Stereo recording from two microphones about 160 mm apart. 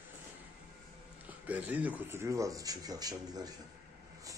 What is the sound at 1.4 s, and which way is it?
Speech, 10° right (ahead or behind).